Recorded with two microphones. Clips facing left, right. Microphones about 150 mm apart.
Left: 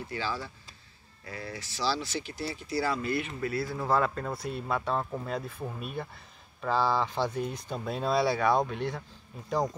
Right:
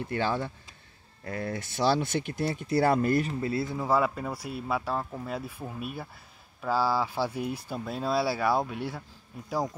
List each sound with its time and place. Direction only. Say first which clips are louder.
0.0 s speech: right 6 dB; 55° right (ahead or behind)
3.3 s speech: right 2 dB; 25° right (ahead or behind)
3.7 s speech: right 1 dB; 10° right (ahead or behind)